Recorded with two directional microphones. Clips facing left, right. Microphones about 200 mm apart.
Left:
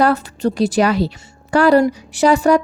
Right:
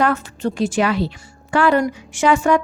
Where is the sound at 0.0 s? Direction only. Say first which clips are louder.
Left 3 dB; 35° left (ahead or behind).